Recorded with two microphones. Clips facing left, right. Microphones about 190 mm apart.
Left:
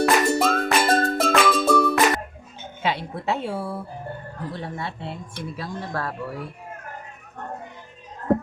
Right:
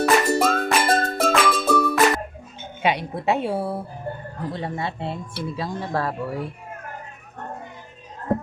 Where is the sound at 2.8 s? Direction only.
15° right (ahead or behind).